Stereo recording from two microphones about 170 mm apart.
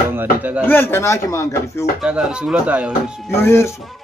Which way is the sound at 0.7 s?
15° left (ahead or behind).